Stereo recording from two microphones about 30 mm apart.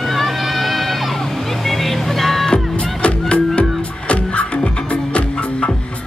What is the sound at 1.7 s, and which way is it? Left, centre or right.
Music, centre.